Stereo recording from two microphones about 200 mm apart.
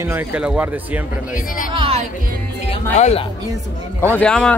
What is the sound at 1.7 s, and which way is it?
Music, 30° right (ahead or behind).